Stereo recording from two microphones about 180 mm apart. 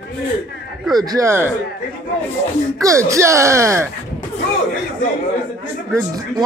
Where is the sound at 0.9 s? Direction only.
20° right (ahead or behind).